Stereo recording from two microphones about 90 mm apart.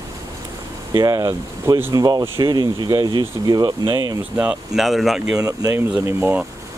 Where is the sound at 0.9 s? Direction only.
40° right (ahead or behind).